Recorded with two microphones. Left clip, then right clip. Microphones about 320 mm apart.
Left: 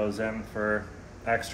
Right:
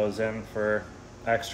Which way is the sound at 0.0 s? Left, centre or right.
Right.